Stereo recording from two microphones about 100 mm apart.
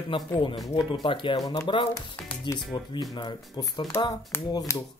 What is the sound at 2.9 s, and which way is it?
Speech, 50° left (ahead or behind).